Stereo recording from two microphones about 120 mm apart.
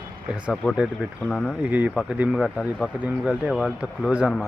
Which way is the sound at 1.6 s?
15° right (ahead or behind).